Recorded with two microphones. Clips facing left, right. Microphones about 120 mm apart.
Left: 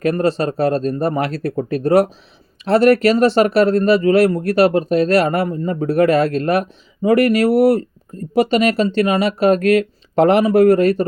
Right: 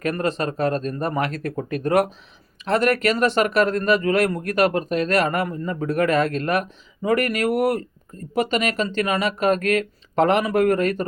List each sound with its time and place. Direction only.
0.0 s speech: 35° left (ahead or behind)